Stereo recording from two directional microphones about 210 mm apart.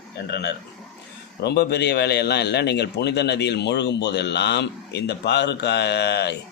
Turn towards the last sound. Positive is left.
turn(degrees=55)  # may be behind; listen again after turning